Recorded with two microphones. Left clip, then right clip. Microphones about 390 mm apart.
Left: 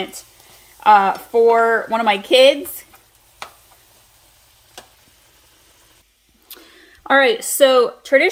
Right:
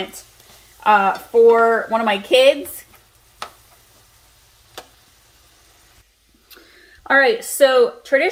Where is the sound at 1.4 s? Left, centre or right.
Left.